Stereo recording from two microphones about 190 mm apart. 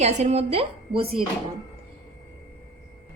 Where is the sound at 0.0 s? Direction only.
35° right (ahead or behind).